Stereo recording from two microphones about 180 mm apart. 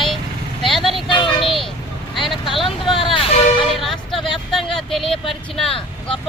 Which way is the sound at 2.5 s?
Centre (ahead or behind).